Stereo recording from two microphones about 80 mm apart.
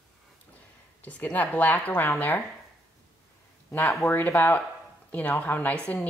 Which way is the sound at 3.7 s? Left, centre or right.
Left.